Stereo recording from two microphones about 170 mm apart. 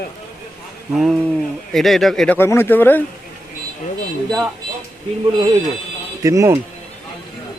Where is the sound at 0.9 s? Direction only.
Centre (ahead or behind).